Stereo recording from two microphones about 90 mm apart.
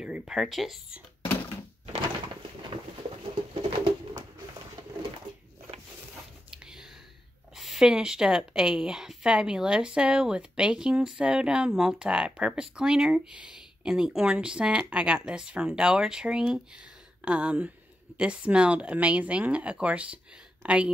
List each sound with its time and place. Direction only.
0.0 s speech: 10° right (ahead or behind)
3.5 s pigeon: 90° right
6.5 s whispering: 10° right (ahead or behind)
7.5 s speech: 5° right (ahead or behind)